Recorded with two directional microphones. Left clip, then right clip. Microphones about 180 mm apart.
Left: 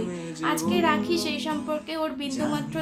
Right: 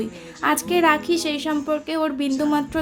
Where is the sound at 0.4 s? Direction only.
40° right (ahead or behind).